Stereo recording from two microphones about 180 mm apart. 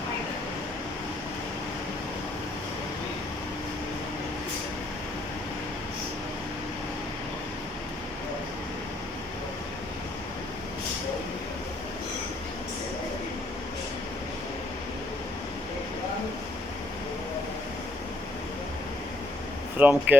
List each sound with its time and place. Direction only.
19.8 s speech: 10° right (ahead or behind)